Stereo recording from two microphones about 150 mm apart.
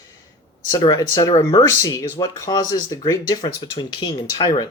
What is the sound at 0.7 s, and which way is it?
Speech, 25° left (ahead or behind).